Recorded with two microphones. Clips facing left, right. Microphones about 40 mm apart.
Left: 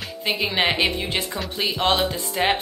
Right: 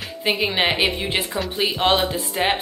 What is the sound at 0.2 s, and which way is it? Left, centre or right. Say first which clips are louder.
A woman's voice: right 2 dB; centre.